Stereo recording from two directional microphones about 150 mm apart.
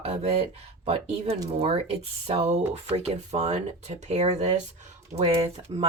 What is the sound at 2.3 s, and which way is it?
Speech, 45° right (ahead or behind).